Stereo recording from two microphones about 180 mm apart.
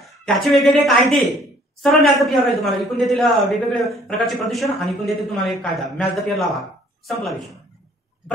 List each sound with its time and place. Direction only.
0.2 s a man's voice: centre (ahead or behind)